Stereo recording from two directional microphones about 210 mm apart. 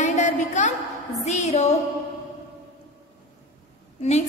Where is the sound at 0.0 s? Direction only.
35° left (ahead or behind).